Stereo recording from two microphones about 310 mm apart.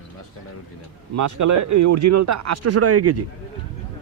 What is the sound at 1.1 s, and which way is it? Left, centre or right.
Speech, right.